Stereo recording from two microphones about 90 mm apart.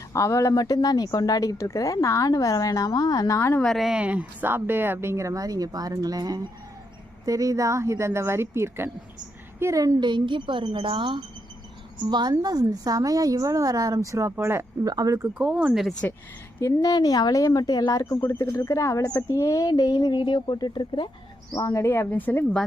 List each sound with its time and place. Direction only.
0.1 s speech: 35° left (ahead or behind)
3.3 s speech: 30° left (ahead or behind)
3.6 s a woman's voice: centre (ahead or behind); by 10.0 s 35° right (ahead or behind)
10.0 s a woman's voice: 60° right (ahead or behind)
11.9 s a woman's voice: 55° right (ahead or behind); by 14.3 s 35° right (ahead or behind)
14.3 s a woman's voice: 25° right (ahead or behind)
14.8 s speech: 45° right (ahead or behind)
15.4 s speech: 10° right (ahead or behind)
16.6 s speech: 40° left (ahead or behind); by 21.1 s 60° left (ahead or behind)
21.5 s speech: 35° left (ahead or behind)
22.1 s speech: 20° left (ahead or behind)